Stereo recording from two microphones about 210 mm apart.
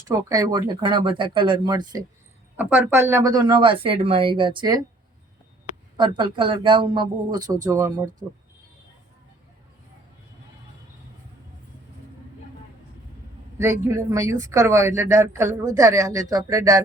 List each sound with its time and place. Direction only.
0.1 s speech: 15° right (ahead or behind)
6.0 s speech: 25° right (ahead or behind)
13.6 s speech: 15° right (ahead or behind)